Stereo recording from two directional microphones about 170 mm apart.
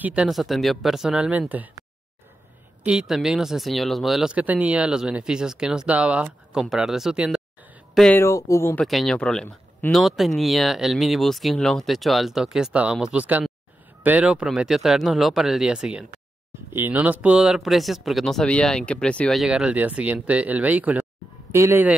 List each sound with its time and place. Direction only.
0.0 s speech: 5° right (ahead or behind)
2.8 s speech: 5° right (ahead or behind)
8.2 s speech: 20° left (ahead or behind)
8.8 s speech: centre (ahead or behind)